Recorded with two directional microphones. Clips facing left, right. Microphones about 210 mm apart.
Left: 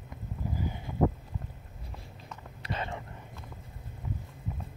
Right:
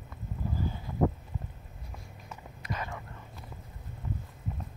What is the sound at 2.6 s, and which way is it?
Whispering, 30° left (ahead or behind).